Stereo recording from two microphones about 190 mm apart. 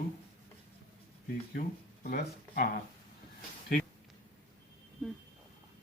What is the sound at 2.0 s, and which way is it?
Speech, 50° left (ahead or behind).